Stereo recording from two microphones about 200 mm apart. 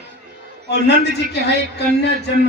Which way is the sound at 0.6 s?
55° left (ahead or behind).